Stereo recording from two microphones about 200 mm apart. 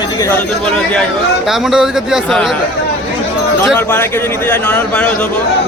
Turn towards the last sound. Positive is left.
turn(degrees=5)  # may be behind; listen again after turning